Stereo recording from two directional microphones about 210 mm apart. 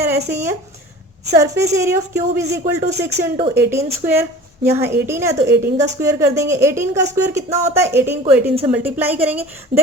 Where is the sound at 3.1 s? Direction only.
30° right (ahead or behind).